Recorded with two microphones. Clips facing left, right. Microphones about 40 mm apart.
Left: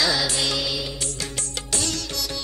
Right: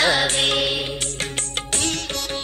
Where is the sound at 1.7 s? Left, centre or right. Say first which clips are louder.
Right 2 dB; right.